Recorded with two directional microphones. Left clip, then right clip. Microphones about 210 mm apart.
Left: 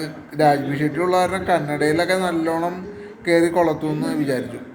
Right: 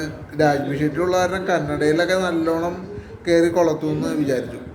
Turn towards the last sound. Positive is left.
turn(degrees=-5)  # may be behind; listen again after turning